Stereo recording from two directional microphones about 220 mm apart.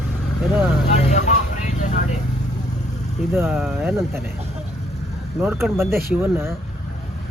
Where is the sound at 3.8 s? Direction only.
10° right (ahead or behind).